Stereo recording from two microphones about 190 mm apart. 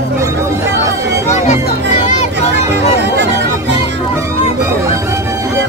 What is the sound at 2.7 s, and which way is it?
Music, 65° right (ahead or behind).